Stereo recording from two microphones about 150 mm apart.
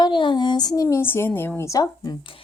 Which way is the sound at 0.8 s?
15° left (ahead or behind).